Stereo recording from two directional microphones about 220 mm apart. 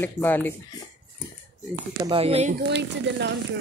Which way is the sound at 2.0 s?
25° right (ahead or behind).